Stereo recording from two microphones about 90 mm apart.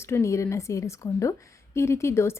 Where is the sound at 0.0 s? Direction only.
30° left (ahead or behind).